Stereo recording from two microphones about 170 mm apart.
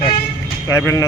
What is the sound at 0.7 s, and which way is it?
Speech, 15° left (ahead or behind).